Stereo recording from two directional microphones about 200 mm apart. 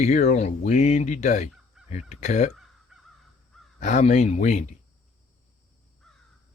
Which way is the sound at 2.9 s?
Centre (ahead or behind).